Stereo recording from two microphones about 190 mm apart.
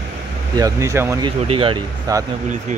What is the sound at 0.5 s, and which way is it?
Speech, 15° right (ahead or behind).